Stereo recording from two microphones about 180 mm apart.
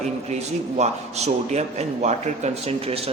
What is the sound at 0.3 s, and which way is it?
A man's voice, 40° right (ahead or behind).